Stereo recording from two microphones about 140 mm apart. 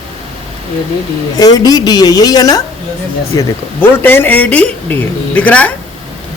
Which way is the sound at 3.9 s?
15° left (ahead or behind).